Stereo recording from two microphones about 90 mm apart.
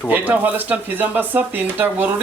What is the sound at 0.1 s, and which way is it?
Speech, 20° right (ahead or behind).